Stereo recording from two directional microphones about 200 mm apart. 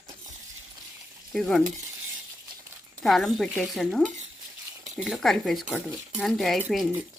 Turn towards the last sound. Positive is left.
turn(degrees=-5)  # may be behind; listen again after turning